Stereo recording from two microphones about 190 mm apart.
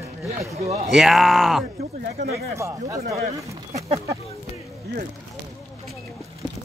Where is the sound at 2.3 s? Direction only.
15° right (ahead or behind).